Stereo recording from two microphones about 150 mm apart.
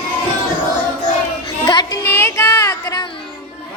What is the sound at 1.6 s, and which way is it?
Child singing, 25° left (ahead or behind).